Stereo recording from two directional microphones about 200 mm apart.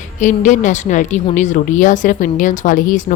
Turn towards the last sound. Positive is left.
turn(degrees=40)  # may be behind; listen again after turning